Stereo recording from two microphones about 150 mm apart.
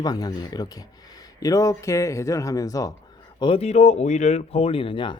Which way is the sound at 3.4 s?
40° left (ahead or behind).